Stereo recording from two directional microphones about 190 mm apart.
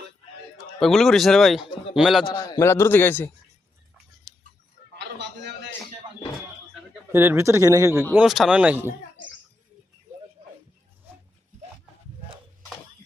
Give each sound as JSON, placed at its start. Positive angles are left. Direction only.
{"t": 0.8, "sound": "speech", "side_deg": 0}
{"t": 2.3, "sound": "a man's voice", "side_deg": 20}
{"t": 4.9, "sound": "a sound", "side_deg": -65}
{"t": 7.1, "sound": "speech", "side_deg": -10}
{"t": 8.1, "sound": "speech", "side_deg": -5}